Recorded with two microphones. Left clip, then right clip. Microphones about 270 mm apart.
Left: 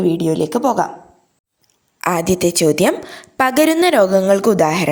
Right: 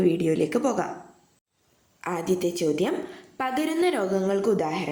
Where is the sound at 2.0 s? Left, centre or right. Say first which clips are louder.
Left 10 dB; left.